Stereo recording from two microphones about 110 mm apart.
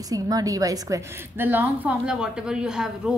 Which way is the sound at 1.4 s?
15° right (ahead or behind).